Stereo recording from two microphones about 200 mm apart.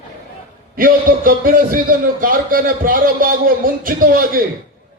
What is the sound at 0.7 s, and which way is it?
A man's voice, 45° right (ahead or behind).